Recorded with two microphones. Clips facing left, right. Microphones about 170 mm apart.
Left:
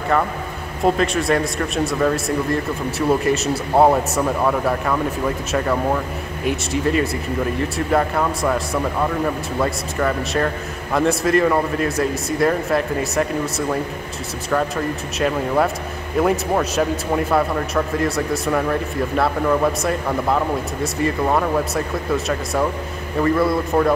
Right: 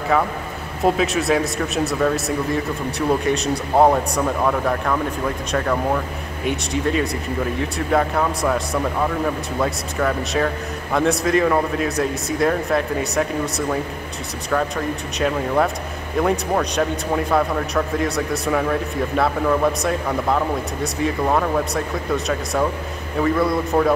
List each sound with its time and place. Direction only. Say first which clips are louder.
0.8 s a man's voice: even; centre (ahead or behind)